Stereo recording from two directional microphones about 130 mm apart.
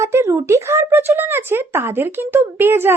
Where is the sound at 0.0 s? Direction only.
20° right (ahead or behind).